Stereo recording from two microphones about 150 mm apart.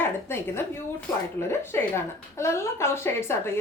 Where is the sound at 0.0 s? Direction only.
15° left (ahead or behind).